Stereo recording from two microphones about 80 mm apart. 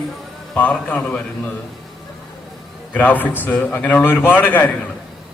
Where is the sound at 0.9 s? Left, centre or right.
Centre.